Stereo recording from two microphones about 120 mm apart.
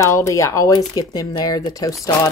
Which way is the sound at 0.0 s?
25° left (ahead or behind).